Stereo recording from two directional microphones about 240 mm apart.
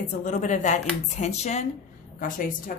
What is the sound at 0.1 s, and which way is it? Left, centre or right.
A woman's voice, left.